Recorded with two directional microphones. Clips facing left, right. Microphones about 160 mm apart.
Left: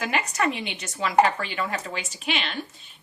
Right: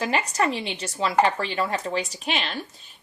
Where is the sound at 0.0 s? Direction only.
35° right (ahead or behind).